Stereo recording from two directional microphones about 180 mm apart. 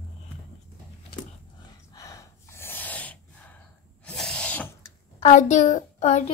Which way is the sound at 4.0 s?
5° left (ahead or behind).